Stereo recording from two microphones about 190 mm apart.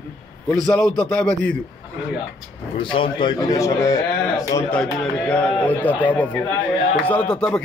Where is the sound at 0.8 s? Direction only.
20° right (ahead or behind).